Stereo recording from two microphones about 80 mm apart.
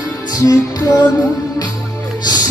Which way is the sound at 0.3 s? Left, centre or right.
Left.